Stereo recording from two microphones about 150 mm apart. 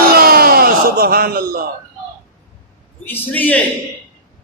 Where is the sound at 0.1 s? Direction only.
90° right.